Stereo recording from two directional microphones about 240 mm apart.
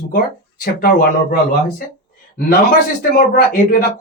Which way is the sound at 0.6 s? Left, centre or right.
Left.